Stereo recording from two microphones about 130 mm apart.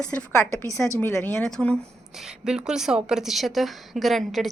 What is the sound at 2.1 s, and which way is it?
A woman's voice, 5° right (ahead or behind).